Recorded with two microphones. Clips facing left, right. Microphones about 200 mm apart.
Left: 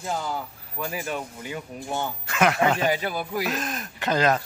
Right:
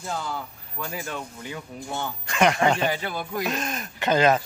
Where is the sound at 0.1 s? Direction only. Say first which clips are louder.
Left 2 dB; 10° left (ahead or behind).